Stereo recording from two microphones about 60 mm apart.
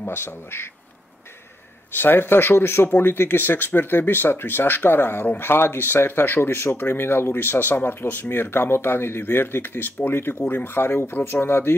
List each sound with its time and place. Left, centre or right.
0.0 s speech: left
1.9 s speech: left